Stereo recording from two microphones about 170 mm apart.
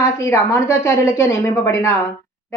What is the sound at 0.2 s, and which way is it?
Speech, 15° left (ahead or behind).